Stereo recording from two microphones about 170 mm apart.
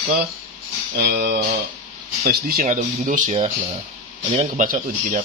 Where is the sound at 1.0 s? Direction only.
75° right (ahead or behind).